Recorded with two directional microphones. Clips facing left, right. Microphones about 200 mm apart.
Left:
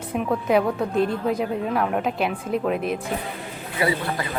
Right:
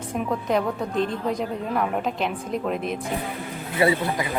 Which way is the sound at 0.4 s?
5° left (ahead or behind).